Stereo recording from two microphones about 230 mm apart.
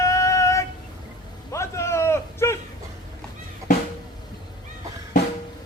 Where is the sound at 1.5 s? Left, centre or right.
Centre.